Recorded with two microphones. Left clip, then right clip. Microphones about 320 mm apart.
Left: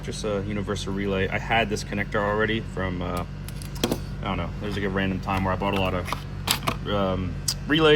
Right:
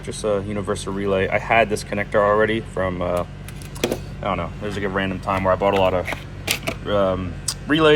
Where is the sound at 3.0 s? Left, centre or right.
Right.